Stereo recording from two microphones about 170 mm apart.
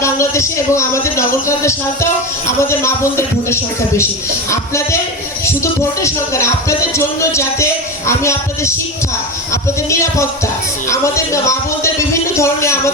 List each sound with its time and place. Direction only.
0.0 s speech: 15° left (ahead or behind)
6.0 s speech: 15° left (ahead or behind)